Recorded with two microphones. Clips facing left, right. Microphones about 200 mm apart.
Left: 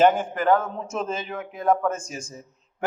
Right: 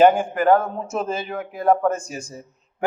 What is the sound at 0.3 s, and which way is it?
A man's voice, 45° right (ahead or behind).